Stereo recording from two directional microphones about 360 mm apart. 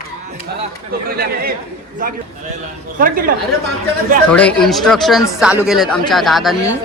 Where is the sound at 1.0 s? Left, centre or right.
Right.